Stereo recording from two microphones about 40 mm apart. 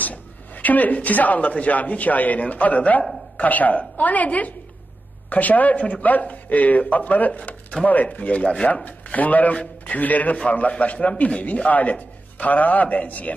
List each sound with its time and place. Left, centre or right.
0.0 s a sound: left
1.5 s a man's voice: left
9.5 s a man's voice: left
9.9 s a man's voice: left